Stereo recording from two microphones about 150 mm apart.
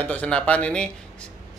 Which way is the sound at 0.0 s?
10° left (ahead or behind).